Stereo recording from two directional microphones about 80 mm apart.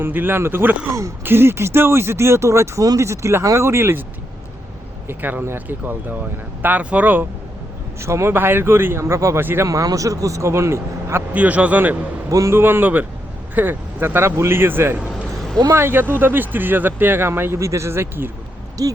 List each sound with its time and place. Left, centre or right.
0.0 s speech: right
5.0 s speech: right
8.0 s speech: right
9.6 s a man's voice: right
11.3 s speech: centre
12.3 s a man's voice: right
12.5 s speech: right
18.8 s a man's voice: right